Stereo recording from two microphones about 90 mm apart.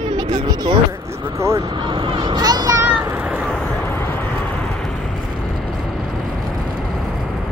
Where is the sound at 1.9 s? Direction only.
65° right (ahead or behind); by 2.7 s 45° right (ahead or behind).